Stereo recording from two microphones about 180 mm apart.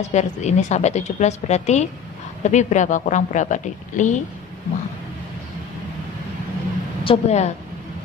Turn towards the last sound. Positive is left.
turn(degrees=35)  # may be behind; listen again after turning